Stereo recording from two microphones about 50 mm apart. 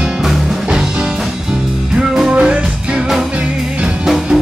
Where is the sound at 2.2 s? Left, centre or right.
Right.